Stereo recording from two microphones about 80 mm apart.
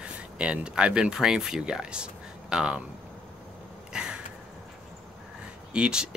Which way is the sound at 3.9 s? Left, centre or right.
Centre.